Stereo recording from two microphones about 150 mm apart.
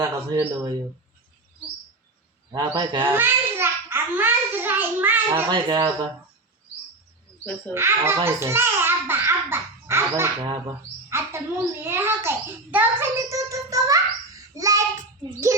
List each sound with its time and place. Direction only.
0.0 s speech: 25° right (ahead or behind)
2.5 s speech: 30° right (ahead or behind)
3.1 s a sound: 15° right (ahead or behind)
5.5 s speech: 30° right (ahead or behind)
7.7 s babbling: 15° right (ahead or behind)
11.1 s a sound: 15° right (ahead or behind)
11.8 s a child's voice: 15° right (ahead or behind)
12.7 s child singing: 15° right (ahead or behind)